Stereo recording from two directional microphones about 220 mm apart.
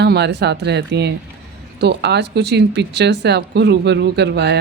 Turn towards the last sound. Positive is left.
turn(degrees=-50)  # may be behind; listen again after turning